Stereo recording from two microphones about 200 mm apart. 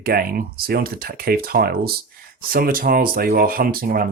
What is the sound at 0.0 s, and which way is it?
Speech, 45° right (ahead or behind).